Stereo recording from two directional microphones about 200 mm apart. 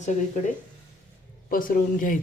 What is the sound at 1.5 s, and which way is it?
Speech, 45° left (ahead or behind).